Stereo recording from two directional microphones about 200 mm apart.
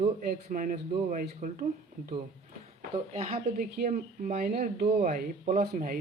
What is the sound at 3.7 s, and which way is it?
Speech, 45° right (ahead or behind).